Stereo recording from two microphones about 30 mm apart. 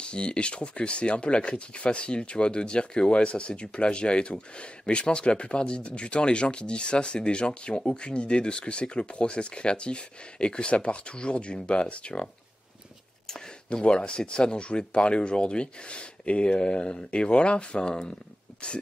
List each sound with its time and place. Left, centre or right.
0.0 s speech: left
13.8 s speech: left